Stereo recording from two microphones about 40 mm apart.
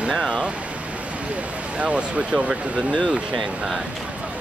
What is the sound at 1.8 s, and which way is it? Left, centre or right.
Speech, right.